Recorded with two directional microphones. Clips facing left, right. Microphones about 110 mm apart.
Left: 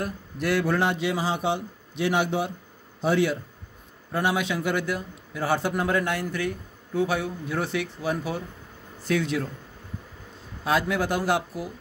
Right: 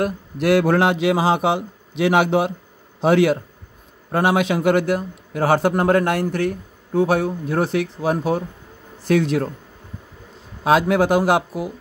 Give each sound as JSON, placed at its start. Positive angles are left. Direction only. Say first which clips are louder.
{"t": 0.0, "sound": "a man's voice", "louder": "right 8 dB", "side_deg": -75}
{"t": 4.6, "sound": "speech", "louder": "right 9 dB", "side_deg": -55}
{"t": 6.2, "sound": "speech", "louder": "right 7 dB", "side_deg": -45}
{"t": 10.6, "sound": "speech", "louder": "right 8 dB", "side_deg": -60}